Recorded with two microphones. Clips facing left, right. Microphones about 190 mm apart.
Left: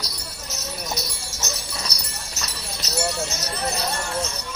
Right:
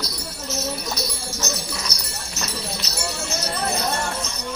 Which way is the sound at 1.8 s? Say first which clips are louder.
Right 2 dB; 40° left (ahead or behind).